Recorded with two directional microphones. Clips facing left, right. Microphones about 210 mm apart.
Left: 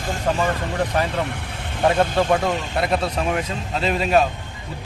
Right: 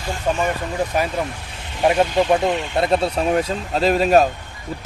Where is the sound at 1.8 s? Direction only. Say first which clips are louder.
Right 1 dB; 10° right (ahead or behind).